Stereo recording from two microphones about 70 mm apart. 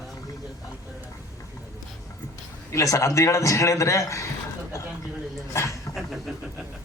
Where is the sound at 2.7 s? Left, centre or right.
Left.